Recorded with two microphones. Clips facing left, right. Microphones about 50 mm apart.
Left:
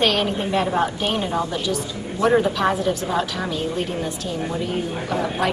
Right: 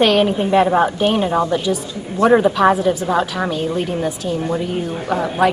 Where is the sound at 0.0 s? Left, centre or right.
Centre.